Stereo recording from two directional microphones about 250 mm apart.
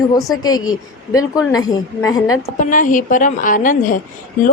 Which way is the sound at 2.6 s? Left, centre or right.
Left.